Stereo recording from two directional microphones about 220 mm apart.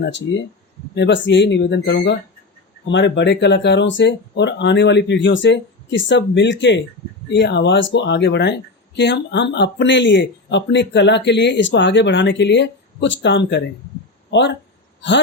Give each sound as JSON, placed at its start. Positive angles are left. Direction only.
{"t": 0.0, "sound": "speech", "side_deg": 50}